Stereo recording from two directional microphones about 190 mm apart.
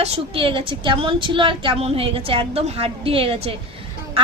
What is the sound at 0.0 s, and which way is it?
A woman's voice, 30° right (ahead or behind).